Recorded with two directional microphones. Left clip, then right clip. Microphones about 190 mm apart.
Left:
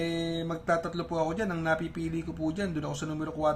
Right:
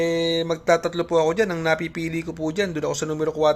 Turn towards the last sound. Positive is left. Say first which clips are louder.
# right 9 dB
turn(degrees=-30)  # may be behind; listen again after turning